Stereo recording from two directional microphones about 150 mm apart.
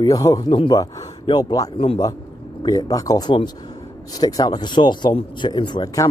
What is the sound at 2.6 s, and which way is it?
Speech, 25° left (ahead or behind).